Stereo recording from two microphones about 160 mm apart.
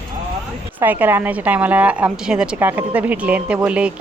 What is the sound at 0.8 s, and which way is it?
A woman's voice, 10° right (ahead or behind).